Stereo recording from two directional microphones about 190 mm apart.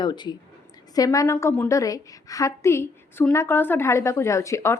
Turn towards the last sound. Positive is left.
turn(degrees=15)  # may be behind; listen again after turning